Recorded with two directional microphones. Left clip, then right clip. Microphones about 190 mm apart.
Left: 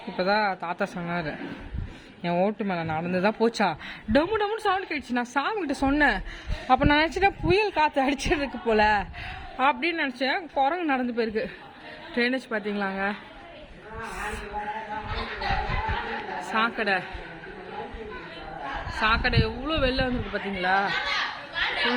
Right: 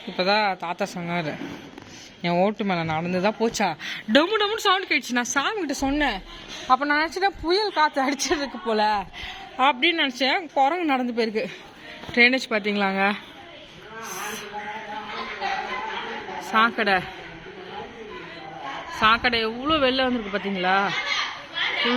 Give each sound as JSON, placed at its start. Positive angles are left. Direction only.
{"t": 0.2, "sound": "speech", "side_deg": 5}
{"t": 6.7, "sound": "a woman's voice", "side_deg": 35}
{"t": 7.4, "sound": "speech", "side_deg": 15}
{"t": 9.2, "sound": "a woman's voice", "side_deg": -5}
{"t": 16.5, "sound": "a man's voice", "side_deg": -30}
{"t": 18.9, "sound": "a man's voice", "side_deg": -35}
{"t": 21.5, "sound": "a sound", "side_deg": -25}